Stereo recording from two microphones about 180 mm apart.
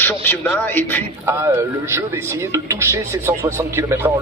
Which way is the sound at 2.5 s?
15° right (ahead or behind).